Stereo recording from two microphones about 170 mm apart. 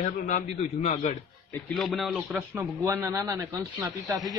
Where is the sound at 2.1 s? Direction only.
10° right (ahead or behind).